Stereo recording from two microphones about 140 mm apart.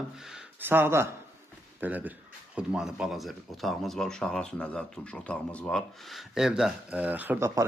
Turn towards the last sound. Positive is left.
turn(degrees=-15)  # may be behind; listen again after turning